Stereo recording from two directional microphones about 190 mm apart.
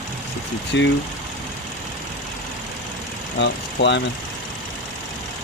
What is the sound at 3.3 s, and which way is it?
Speech, 65° left (ahead or behind).